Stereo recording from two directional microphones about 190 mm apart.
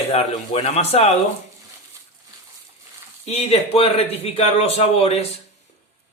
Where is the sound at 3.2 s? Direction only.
30° left (ahead or behind).